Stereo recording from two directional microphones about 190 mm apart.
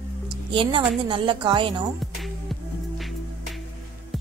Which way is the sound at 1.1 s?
25° right (ahead or behind).